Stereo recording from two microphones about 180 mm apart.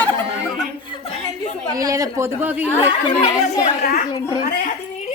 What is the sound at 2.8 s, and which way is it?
Speech, 35° left (ahead or behind).